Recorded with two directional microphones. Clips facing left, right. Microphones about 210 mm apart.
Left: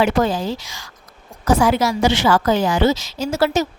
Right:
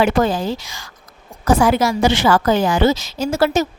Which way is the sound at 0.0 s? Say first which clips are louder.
Right 1 dB; 50° right (ahead or behind).